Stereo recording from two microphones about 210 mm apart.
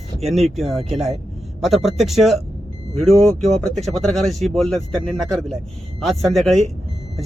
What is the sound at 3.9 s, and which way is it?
Speech, centre (ahead or behind).